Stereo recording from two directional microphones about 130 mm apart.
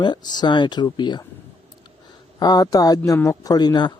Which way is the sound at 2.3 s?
30° left (ahead or behind).